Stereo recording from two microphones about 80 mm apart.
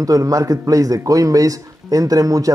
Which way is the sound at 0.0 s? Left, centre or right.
Right.